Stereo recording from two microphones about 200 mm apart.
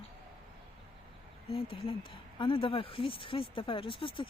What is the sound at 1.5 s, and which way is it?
Speech, 30° left (ahead or behind).